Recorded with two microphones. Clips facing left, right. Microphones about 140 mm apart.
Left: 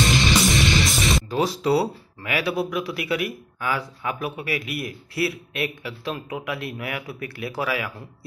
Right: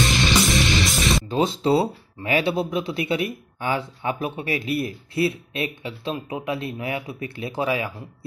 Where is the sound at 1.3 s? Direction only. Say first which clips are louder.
Right 2 dB; 25° right (ahead or behind).